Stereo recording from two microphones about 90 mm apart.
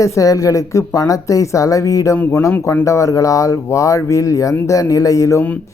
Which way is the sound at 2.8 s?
35° left (ahead or behind).